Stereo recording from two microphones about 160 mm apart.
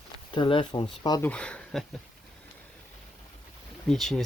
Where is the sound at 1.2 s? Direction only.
5° left (ahead or behind).